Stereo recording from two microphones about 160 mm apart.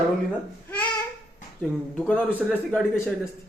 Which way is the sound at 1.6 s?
5° left (ahead or behind).